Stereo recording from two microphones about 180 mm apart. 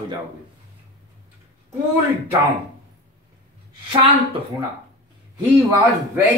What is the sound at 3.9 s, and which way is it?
Speech, 30° right (ahead or behind).